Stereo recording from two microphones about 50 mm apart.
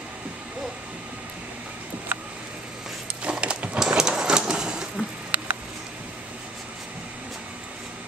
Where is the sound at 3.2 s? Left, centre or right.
Right.